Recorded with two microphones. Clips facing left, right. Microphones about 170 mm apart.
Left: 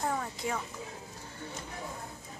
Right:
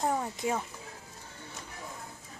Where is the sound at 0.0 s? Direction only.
20° right (ahead or behind).